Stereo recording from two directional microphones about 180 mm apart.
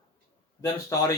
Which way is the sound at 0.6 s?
20° left (ahead or behind).